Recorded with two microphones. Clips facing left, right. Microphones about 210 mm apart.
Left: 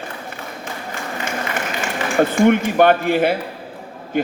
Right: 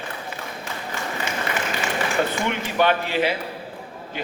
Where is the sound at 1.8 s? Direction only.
50° left (ahead or behind).